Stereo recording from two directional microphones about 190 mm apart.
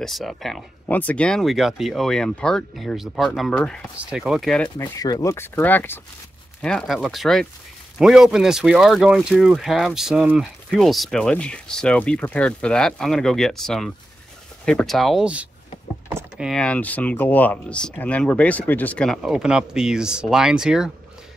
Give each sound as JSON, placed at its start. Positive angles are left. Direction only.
{"t": 0.0, "sound": "speech", "side_deg": 0}
{"t": 4.7, "sound": "speech", "side_deg": 20}
{"t": 16.1, "sound": "power windows", "side_deg": -15}
{"t": 16.4, "sound": "speech", "side_deg": 5}